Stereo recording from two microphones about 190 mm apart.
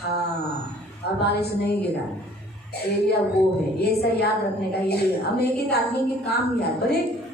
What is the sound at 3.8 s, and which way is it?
Child singing, 55° left (ahead or behind).